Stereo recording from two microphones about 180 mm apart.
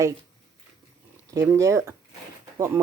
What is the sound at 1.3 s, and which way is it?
Speech, 15° right (ahead or behind).